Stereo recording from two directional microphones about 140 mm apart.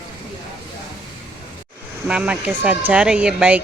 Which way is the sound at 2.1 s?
10° right (ahead or behind).